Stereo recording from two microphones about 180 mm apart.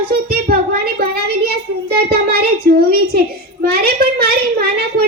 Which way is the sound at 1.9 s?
60° right (ahead or behind).